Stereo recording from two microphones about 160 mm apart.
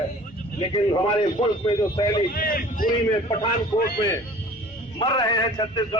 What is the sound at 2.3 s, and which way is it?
Speech, 65° left (ahead or behind).